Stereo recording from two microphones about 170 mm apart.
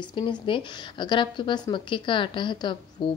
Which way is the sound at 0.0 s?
25° left (ahead or behind).